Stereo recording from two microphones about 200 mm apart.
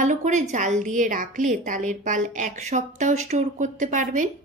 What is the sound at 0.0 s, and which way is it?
A woman's voice, 40° right (ahead or behind).